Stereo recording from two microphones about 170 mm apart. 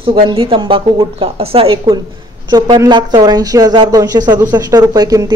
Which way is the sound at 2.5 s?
25° right (ahead or behind).